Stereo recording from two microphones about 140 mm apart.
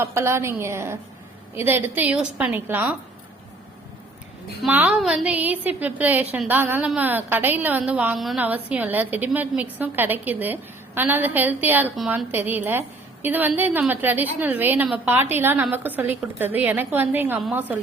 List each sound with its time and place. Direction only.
0.0 s a woman's voice: 20° right (ahead or behind)
4.7 s a woman's voice: 10° right (ahead or behind)